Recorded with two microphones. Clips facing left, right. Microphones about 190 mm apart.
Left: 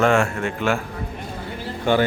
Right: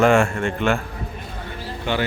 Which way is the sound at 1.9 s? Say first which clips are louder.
Left 5 dB; 50° left (ahead or behind).